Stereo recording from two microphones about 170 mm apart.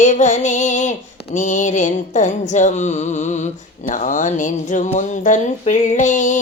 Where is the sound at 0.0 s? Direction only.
45° left (ahead or behind).